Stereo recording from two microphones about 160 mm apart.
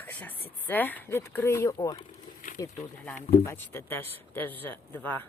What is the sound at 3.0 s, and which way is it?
A man's voice, 10° left (ahead or behind).